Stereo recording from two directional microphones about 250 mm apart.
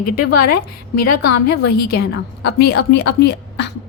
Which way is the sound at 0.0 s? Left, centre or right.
Left.